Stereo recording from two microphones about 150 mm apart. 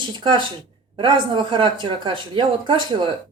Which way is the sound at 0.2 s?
30° right (ahead or behind).